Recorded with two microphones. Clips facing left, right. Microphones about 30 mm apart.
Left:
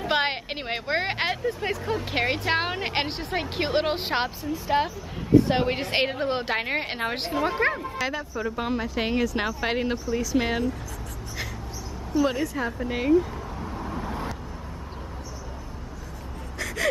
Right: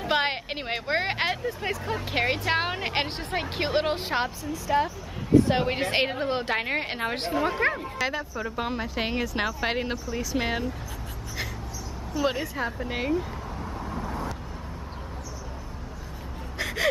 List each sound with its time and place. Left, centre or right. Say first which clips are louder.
0.0 s speech: left 1 dB; centre
3.9 s a woman's voice: left 1 dB; left
5.4 s speech: even; centre
7.7 s speech: even; centre
12.2 s speech: left 3 dB; centre
12.5 s vehicle: left 2 dB; centre
16.5 s gasp: right 1 dB; right